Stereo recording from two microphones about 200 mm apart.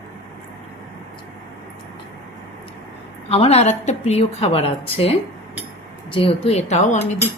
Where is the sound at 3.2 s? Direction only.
30° left (ahead or behind).